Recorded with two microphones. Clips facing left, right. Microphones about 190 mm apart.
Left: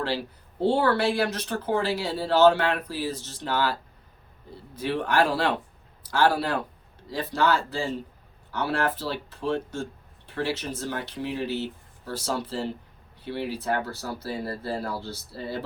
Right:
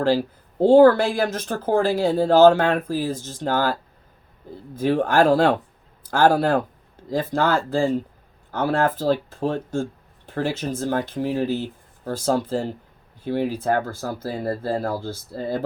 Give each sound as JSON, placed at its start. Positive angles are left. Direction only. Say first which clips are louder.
{"t": 0.6, "sound": "speech", "louder": "right 10 dB", "side_deg": -45}
{"t": 4.8, "sound": "speech", "louder": "right 6 dB", "side_deg": -45}